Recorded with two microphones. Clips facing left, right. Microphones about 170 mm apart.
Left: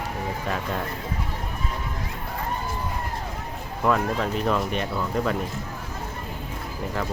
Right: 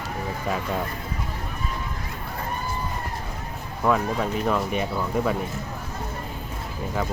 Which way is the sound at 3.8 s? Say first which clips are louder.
Even; 5° right (ahead or behind).